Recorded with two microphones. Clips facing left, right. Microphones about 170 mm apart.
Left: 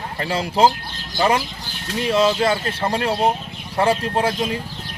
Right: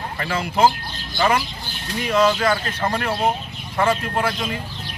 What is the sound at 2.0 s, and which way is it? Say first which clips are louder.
Speech: left 1 dB; 25° left (ahead or behind).